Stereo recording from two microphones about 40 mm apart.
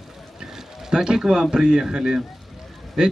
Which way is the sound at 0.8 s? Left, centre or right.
Centre.